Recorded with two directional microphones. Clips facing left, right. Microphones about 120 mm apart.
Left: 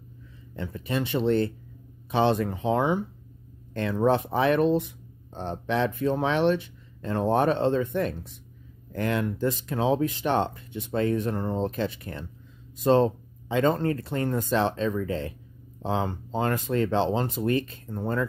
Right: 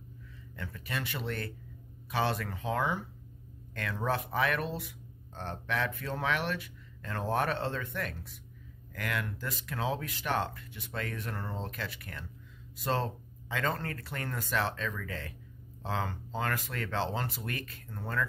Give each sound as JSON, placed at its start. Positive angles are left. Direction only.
{"t": 0.6, "sound": "speech", "side_deg": 25}